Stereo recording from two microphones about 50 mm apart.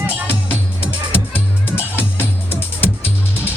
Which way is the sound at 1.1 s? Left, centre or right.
Left.